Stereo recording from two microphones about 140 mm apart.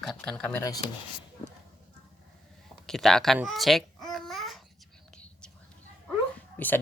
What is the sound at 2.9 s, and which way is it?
Speech, 5° left (ahead or behind).